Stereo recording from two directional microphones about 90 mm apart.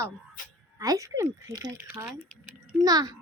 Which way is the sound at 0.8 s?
40° right (ahead or behind).